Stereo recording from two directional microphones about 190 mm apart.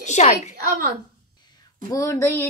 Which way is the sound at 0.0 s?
35° left (ahead or behind).